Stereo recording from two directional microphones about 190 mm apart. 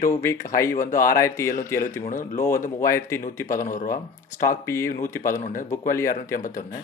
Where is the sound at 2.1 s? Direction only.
45° left (ahead or behind).